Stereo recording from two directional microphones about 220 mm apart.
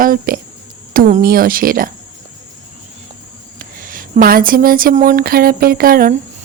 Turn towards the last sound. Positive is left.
turn(degrees=-40)  # may be behind; listen again after turning